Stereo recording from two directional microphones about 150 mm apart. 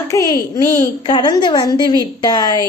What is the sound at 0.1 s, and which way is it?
A child's voice, 20° left (ahead or behind).